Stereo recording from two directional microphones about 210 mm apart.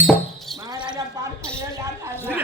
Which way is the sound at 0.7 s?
20° right (ahead or behind).